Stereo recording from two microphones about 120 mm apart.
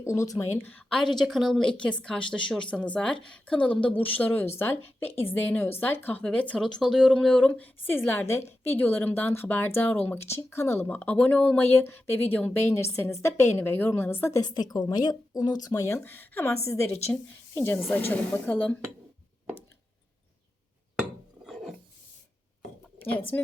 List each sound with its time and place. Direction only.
0.0 s speech: 25° left (ahead or behind)
0.9 s a woman's voice: 5° left (ahead or behind); by 14.4 s 20° left (ahead or behind)
14.4 s a woman's voice: 35° left (ahead or behind); by 18.8 s 15° left (ahead or behind)
21.4 s filing: centre (ahead or behind)
23.1 s a woman's voice: 15° left (ahead or behind)